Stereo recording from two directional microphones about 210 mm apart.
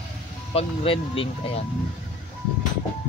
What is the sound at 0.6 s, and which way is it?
Speech, 25° left (ahead or behind).